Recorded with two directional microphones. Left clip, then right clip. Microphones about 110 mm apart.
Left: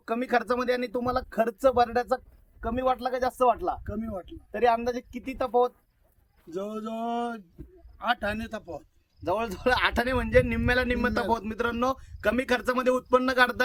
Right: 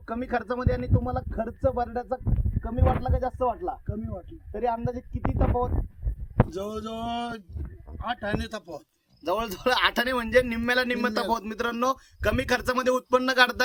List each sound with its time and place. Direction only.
0.0 s speech: 45° left (ahead or behind)
3.8 s speech: 25° left (ahead or behind)
4.5 s speech: 50° left (ahead or behind)
6.5 s speech: 15° left (ahead or behind)
9.2 s speech: 35° left (ahead or behind)